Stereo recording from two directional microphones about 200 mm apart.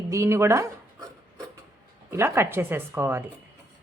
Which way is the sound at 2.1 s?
15° right (ahead or behind).